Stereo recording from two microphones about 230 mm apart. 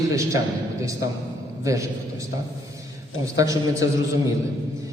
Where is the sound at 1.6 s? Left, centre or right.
Centre.